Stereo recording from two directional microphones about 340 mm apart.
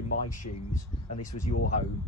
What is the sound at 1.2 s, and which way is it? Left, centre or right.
Speech, left.